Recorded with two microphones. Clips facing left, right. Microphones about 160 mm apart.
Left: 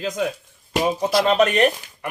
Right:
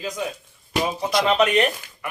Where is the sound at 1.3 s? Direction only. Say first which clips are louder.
Left 2 dB; 40° left (ahead or behind).